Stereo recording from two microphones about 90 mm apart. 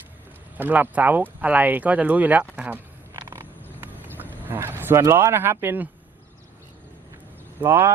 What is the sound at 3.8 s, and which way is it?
Horse, 25° right (ahead or behind).